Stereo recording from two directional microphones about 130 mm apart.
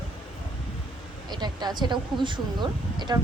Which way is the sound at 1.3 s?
30° right (ahead or behind).